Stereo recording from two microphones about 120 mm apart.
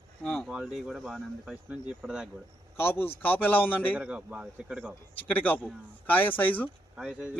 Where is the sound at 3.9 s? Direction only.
10° right (ahead or behind).